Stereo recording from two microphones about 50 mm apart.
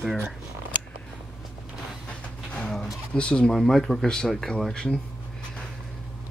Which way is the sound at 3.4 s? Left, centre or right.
Centre.